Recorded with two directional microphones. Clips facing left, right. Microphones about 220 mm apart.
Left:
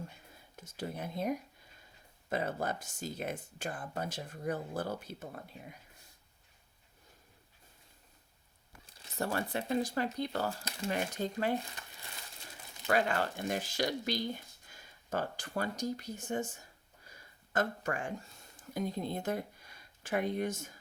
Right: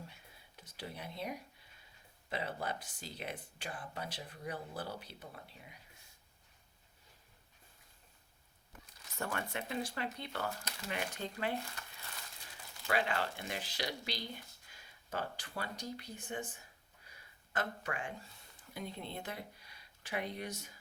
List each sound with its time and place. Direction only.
0.1 s a sound: 45° left (ahead or behind)
2.3 s speech: 45° left (ahead or behind)
9.0 s speech: 35° left (ahead or behind)
10.8 s speech: 40° left (ahead or behind)
12.9 s speech: 45° left (ahead or behind)